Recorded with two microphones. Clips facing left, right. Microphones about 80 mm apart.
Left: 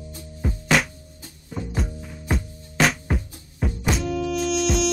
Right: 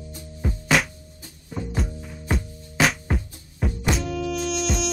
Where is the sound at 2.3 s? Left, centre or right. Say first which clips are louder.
Left 1 dB; centre.